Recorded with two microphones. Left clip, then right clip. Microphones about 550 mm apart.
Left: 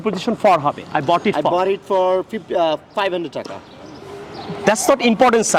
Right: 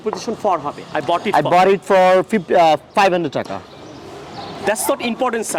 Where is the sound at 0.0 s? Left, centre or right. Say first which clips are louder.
Left 3 dB; left.